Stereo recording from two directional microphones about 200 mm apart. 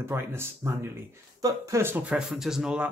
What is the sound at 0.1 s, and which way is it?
Speech, 10° right (ahead or behind).